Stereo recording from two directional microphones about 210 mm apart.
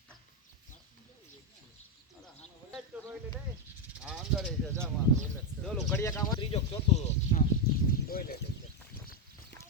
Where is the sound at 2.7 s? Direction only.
5° right (ahead or behind).